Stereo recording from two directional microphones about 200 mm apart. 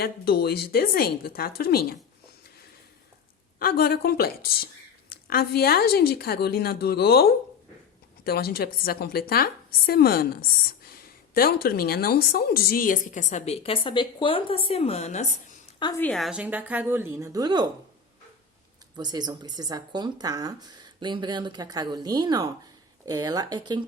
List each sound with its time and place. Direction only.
0.0 s a woman's voice: 50° left (ahead or behind)
3.6 s a woman's voice: 50° left (ahead or behind)
15.8 s a woman's voice: 15° left (ahead or behind)
16.0 s a woman's voice: centre (ahead or behind); by 17.7 s 20° right (ahead or behind)
18.9 s speech: 20° right (ahead or behind)